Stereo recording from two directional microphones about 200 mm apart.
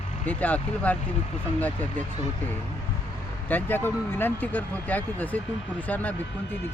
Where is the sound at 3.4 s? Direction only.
10° left (ahead or behind).